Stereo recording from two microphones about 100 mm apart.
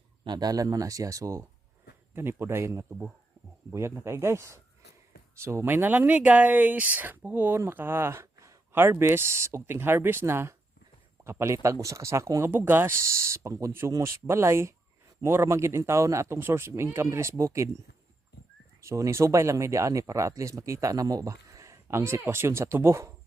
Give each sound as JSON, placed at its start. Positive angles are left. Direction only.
{"t": 0.3, "sound": "speech", "side_deg": -40}